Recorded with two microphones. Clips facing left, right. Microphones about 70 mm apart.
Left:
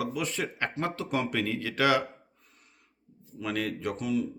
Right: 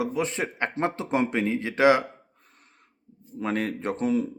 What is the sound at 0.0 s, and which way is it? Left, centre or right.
Speech, right.